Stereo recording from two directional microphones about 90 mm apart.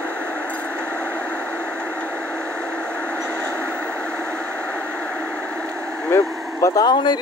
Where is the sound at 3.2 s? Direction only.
15° left (ahead or behind).